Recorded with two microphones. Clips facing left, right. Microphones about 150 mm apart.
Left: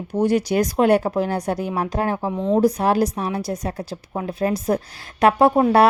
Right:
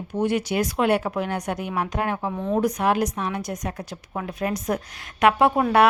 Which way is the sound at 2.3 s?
20° left (ahead or behind).